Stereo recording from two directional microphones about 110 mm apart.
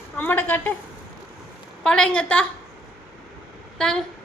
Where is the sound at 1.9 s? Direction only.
5° left (ahead or behind).